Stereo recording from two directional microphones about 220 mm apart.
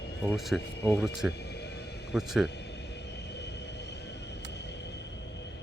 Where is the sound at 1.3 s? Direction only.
50° left (ahead or behind).